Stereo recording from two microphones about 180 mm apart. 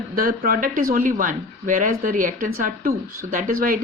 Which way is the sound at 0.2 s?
55° right (ahead or behind).